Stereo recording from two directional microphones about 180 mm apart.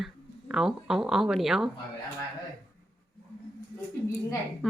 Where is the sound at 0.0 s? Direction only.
5° right (ahead or behind).